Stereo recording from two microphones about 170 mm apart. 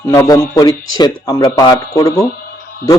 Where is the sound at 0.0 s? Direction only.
20° left (ahead or behind).